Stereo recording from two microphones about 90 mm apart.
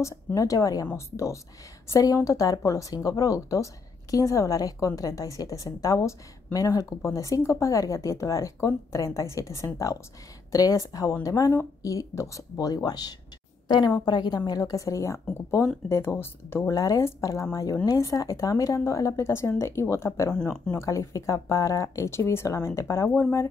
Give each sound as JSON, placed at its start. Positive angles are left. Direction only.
{"t": 0.0, "sound": "a woman's voice", "side_deg": 40}